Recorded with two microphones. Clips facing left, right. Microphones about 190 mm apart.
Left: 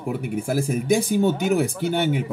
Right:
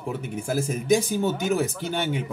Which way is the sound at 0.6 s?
55° left (ahead or behind).